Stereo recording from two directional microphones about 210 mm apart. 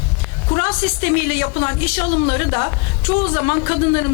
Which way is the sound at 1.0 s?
15° left (ahead or behind).